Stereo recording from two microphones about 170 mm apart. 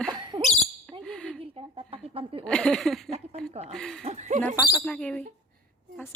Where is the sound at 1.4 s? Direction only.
35° right (ahead or behind).